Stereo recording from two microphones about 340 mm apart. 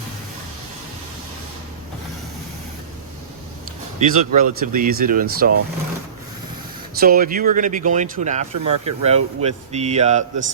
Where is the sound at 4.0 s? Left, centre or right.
Right.